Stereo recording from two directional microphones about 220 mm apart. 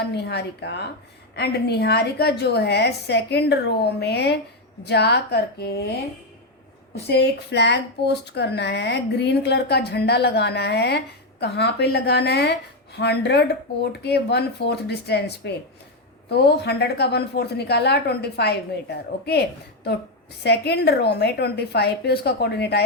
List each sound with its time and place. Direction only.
0.0 s speech: 50° left (ahead or behind)
6.9 s speech: 50° left (ahead or behind)